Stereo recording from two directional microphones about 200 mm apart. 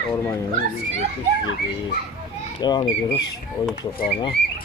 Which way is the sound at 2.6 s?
20° left (ahead or behind).